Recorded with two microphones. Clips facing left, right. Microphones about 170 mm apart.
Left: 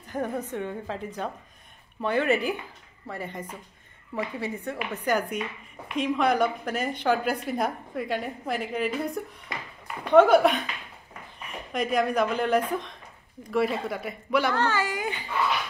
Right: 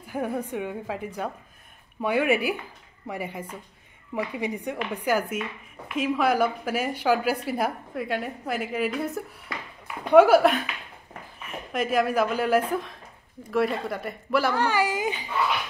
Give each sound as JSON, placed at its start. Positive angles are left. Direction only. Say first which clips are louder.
{"t": 0.0, "sound": "a woman's voice", "louder": "right 1 dB", "side_deg": -10}
{"t": 9.5, "sound": "speech", "louder": "right 1 dB", "side_deg": 20}
{"t": 9.8, "sound": "a woman's voice", "louder": "right 2 dB", "side_deg": -10}